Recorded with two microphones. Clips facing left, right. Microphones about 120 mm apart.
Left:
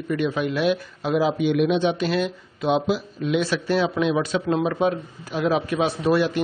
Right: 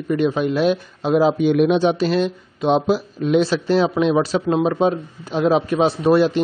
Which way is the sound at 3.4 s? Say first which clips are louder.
Right 5 dB; 30° right (ahead or behind).